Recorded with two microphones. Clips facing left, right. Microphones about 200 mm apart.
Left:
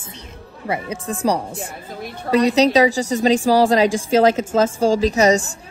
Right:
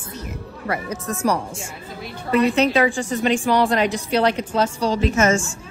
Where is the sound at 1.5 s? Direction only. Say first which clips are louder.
Left 3 dB; 60° left (ahead or behind).